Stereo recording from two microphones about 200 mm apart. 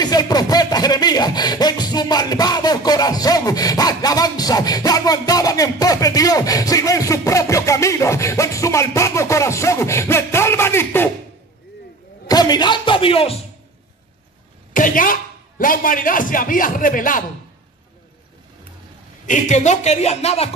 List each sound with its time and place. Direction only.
0.0 s a sound: 20° left (ahead or behind)
12.3 s speech: 20° left (ahead or behind)
14.7 s a man's voice: 40° left (ahead or behind)
19.2 s speech: 40° left (ahead or behind)